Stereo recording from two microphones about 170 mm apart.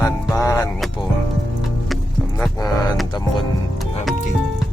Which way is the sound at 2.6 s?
20° left (ahead or behind).